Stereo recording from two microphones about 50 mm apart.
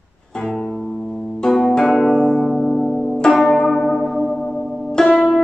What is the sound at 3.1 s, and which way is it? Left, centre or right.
Church bell, centre.